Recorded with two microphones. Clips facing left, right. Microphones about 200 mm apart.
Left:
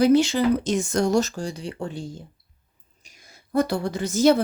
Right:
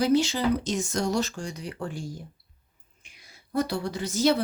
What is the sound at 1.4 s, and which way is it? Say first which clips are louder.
Speech: left 4 dB; 30° left (ahead or behind).